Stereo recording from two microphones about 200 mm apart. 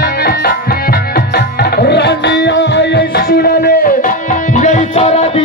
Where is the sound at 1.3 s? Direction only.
55° left (ahead or behind).